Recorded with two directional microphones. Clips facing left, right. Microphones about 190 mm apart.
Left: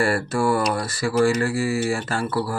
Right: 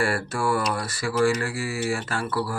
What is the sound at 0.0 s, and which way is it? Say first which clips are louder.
Speech: left 4 dB; 40° left (ahead or behind).